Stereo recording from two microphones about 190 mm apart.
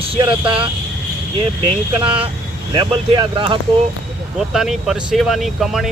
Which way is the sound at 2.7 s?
25° right (ahead or behind).